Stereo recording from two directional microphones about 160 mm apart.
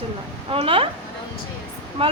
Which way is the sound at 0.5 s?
35° right (ahead or behind).